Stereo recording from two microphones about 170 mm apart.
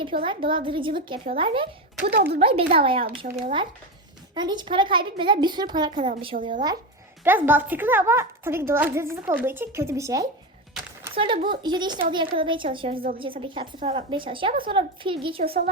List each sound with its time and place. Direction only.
0.0 s a woman's voice: 30° right (ahead or behind)
2.0 s a child's voice: 70° right (ahead or behind)
2.4 s a woman's voice: 35° right (ahead or behind)
6.3 s speech: 45° right (ahead or behind)
7.3 s a woman's voice: 10° right (ahead or behind)
11.1 s a child's voice: 30° right (ahead or behind)